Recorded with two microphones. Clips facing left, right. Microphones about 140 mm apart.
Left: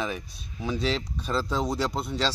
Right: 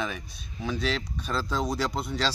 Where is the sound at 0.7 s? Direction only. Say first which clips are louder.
Left 2 dB; 30° left (ahead or behind).